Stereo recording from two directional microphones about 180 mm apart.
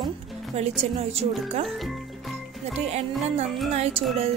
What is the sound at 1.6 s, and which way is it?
Speech, centre (ahead or behind).